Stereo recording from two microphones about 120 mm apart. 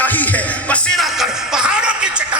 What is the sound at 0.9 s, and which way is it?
Music, centre (ahead or behind).